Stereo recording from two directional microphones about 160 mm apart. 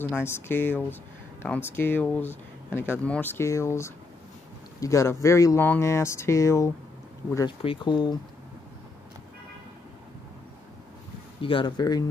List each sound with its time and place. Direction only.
0.0 s speech: 15° left (ahead or behind)
7.3 s speech: 30° left (ahead or behind)
11.4 s speech: 30° left (ahead or behind)